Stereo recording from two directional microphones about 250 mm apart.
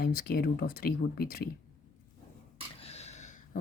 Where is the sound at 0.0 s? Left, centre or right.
Left.